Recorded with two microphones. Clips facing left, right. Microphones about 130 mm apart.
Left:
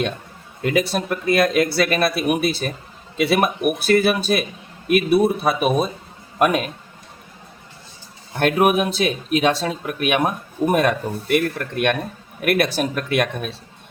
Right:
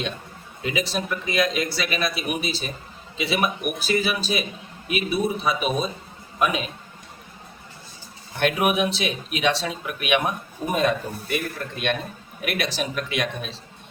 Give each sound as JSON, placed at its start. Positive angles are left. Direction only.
{"t": 0.6, "sound": "speech", "side_deg": 55}
{"t": 8.4, "sound": "speech", "side_deg": 45}
{"t": 10.8, "sound": "speech", "side_deg": 60}